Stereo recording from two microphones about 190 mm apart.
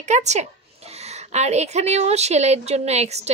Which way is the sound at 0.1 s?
35° right (ahead or behind).